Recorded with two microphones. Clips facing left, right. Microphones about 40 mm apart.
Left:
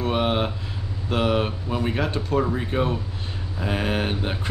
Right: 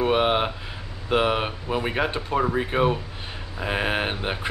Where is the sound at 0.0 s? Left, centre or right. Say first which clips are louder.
Right 2 dB; right.